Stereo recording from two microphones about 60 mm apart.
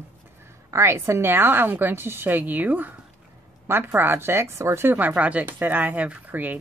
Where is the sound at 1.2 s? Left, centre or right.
Right.